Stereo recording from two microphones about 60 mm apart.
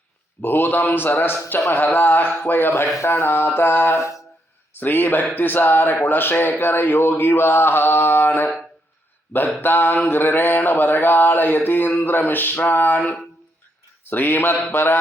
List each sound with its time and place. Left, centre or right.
0.4 s speech: left
9.6 s speech: left